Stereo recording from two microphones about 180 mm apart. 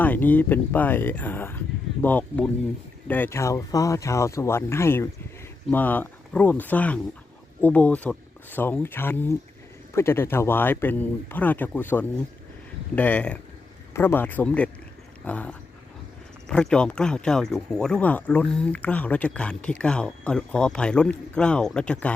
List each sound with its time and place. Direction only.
0.0 s speech: 10° left (ahead or behind)